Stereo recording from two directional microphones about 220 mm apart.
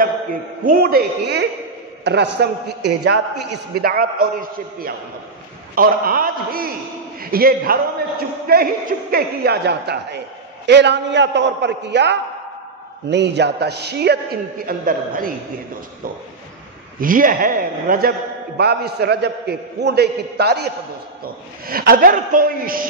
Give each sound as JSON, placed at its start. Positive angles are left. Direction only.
{"t": 0.7, "sound": "a man's voice", "side_deg": -45}
{"t": 17.0, "sound": "a man's voice", "side_deg": -40}